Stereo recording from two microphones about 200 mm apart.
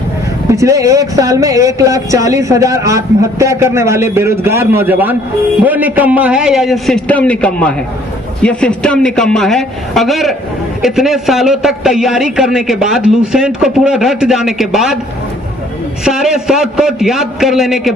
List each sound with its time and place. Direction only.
0.5 s a man's voice: 15° right (ahead or behind)
16.0 s a man's voice: 5° right (ahead or behind)